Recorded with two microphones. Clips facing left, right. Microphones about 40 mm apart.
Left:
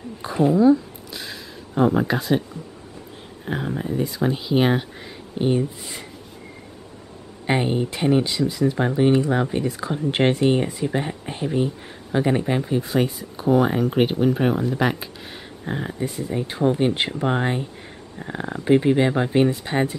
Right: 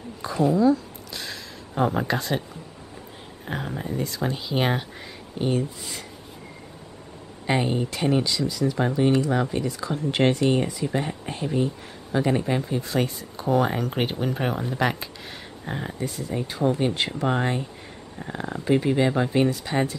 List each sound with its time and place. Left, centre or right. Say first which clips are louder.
0.2 s speech: left 3 dB; left
1.1 s speech: left 1 dB; centre
3.4 s speech: left 4 dB; centre
5.4 s speech: left 4 dB; centre
7.4 s speech: left 2 dB; centre
16.0 s speech: left 2 dB; centre